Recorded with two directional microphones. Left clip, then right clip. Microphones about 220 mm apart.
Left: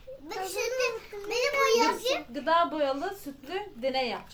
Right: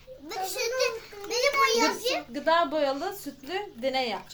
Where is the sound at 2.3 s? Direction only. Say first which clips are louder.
Right 2 dB; 30° right (ahead or behind).